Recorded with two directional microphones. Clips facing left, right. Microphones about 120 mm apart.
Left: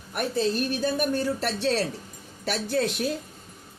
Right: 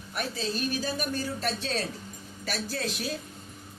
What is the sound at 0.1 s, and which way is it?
Speech, 55° left (ahead or behind).